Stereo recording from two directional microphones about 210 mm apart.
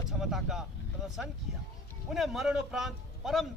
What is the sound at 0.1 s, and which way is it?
Vehicle, centre (ahead or behind).